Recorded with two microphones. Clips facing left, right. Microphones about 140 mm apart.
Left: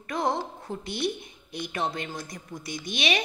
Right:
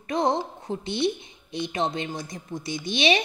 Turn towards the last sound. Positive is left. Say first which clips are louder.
# right 6 dB
turn(degrees=-30)  # may be behind; listen again after turning